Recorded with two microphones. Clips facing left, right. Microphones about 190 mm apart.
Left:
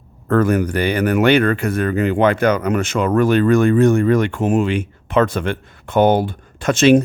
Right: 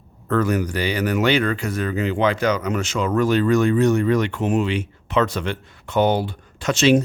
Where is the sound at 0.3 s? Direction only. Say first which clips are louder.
Left 5 dB; 50° left (ahead or behind).